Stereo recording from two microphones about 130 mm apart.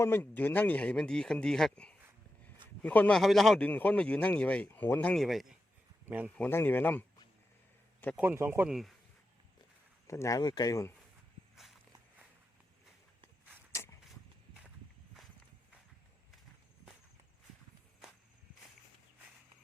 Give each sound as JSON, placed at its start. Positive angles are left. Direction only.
{"t": 0.0, "sound": "speech", "side_deg": 15}
{"t": 3.2, "sound": "speech", "side_deg": 0}
{"t": 3.6, "sound": "speech", "side_deg": 10}
{"t": 5.2, "sound": "speech", "side_deg": 0}
{"t": 6.1, "sound": "speech", "side_deg": -10}
{"t": 6.3, "sound": "speech", "side_deg": 15}
{"t": 8.1, "sound": "speech", "side_deg": -15}
{"t": 8.7, "sound": "speech", "side_deg": 0}
{"t": 10.1, "sound": "speech", "side_deg": 25}
{"t": 11.5, "sound": "walk", "side_deg": 0}